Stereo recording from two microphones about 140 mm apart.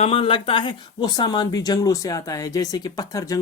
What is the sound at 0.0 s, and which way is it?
Speech, 40° left (ahead or behind).